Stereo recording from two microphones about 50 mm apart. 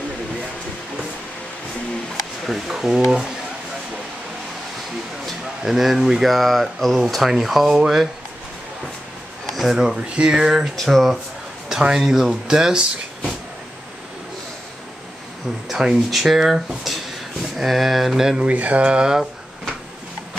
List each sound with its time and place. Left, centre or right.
2.4 s speech: centre
5.6 s speech: centre
9.6 s speech: centre
9.9 s speech: right
10.8 s speech: centre
11.7 s speech: centre
15.7 s speech: centre
18.4 s speech: right